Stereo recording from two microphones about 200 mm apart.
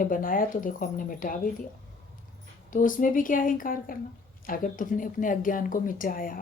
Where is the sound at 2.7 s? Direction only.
40° left (ahead or behind).